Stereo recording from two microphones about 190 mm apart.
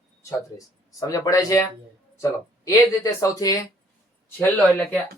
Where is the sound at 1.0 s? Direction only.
20° left (ahead or behind).